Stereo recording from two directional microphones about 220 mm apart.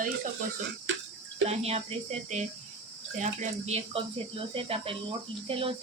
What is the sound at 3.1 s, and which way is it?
Speech, 30° right (ahead or behind).